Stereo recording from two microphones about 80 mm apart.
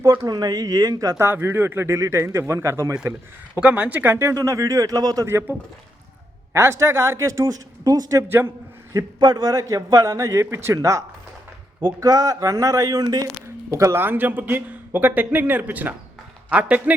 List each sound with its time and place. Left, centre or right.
0.0 s a man's voice: right
1.1 s a man's voice: right
3.1 s speech: centre
4.0 s a man's voice: right
5.2 s a man's voice: right
9.1 s a man's voice: right
11.8 s a man's voice: right
13.7 s a man's voice: right
14.0 s a man's voice: right